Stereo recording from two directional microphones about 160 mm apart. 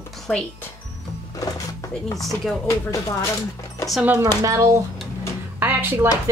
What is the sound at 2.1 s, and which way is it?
Speech, centre (ahead or behind).